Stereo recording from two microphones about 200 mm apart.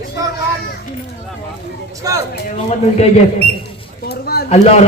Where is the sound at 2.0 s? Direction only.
15° right (ahead or behind).